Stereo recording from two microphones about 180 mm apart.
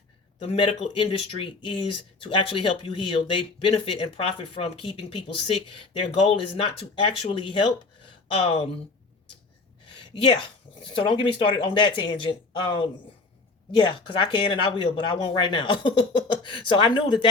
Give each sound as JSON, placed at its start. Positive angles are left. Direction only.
{"t": 0.3, "sound": "speech", "side_deg": 30}
{"t": 9.8, "sound": "speech", "side_deg": 30}